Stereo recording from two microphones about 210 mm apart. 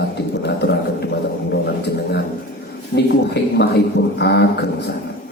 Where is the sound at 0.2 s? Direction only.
50° left (ahead or behind).